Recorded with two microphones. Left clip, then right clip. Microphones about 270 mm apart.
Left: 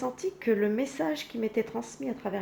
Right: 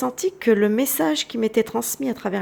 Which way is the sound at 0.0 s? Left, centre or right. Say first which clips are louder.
Right 9 dB; right.